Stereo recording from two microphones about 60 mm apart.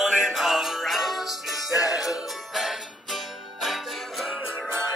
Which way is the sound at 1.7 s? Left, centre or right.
Left.